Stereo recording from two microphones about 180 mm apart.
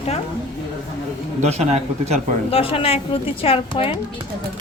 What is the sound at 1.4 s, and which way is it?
A man's voice, 40° right (ahead or behind).